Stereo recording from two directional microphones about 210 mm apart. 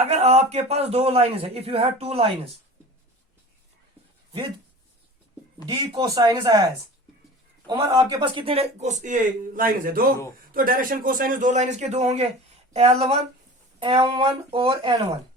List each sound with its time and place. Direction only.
0.0 s speech: 30° right (ahead or behind)
5.6 s speech: 20° right (ahead or behind)
7.7 s speech: 15° right (ahead or behind)